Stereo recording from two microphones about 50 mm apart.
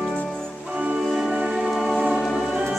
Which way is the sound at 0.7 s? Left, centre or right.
Right.